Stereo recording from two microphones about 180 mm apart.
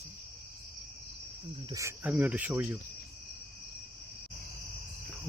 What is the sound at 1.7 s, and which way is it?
Speech, 15° right (ahead or behind).